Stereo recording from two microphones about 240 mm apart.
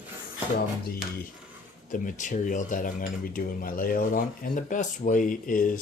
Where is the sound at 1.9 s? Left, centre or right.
Left.